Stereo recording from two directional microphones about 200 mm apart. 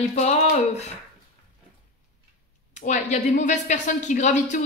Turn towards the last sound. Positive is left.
turn(degrees=40)  # may be behind; listen again after turning